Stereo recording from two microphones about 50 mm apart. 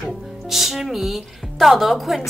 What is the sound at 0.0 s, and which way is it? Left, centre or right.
A woman's voice, centre.